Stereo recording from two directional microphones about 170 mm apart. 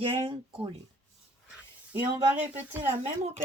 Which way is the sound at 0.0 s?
30° right (ahead or behind).